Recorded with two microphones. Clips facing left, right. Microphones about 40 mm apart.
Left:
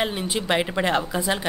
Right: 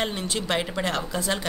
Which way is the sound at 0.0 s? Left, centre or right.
Centre.